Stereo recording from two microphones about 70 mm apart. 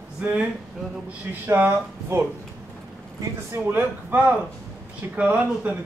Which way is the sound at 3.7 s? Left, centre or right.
Right.